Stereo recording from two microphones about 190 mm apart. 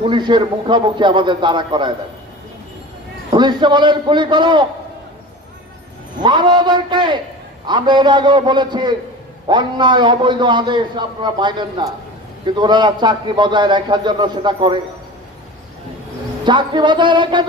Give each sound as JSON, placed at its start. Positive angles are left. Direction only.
{"t": 0.0, "sound": "a man's voice", "side_deg": -25}
{"t": 3.3, "sound": "a man's voice", "side_deg": -25}
{"t": 6.2, "sound": "a man's voice", "side_deg": -25}
{"t": 16.4, "sound": "a man's voice", "side_deg": -25}